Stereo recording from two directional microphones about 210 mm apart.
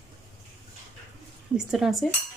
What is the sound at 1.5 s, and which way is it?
Speech, centre (ahead or behind).